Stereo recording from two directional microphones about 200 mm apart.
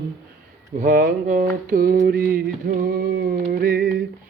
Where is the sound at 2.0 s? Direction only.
50° right (ahead or behind).